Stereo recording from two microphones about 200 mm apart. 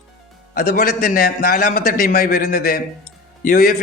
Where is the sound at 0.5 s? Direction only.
50° left (ahead or behind).